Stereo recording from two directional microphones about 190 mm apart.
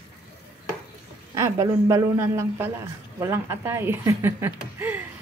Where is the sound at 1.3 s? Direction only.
15° right (ahead or behind).